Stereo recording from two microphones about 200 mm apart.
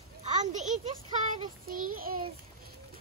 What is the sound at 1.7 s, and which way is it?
Child singing, 45° right (ahead or behind).